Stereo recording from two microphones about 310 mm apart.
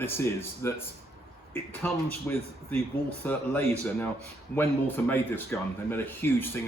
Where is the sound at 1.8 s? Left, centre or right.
Centre.